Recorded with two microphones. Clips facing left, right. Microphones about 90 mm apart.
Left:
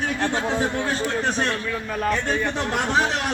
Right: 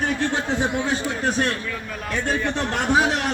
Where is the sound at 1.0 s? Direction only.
5° right (ahead or behind).